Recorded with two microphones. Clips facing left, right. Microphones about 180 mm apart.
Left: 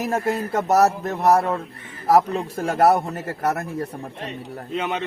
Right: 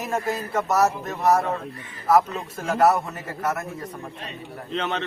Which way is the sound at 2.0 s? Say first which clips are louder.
Left 2 dB; 35° left (ahead or behind).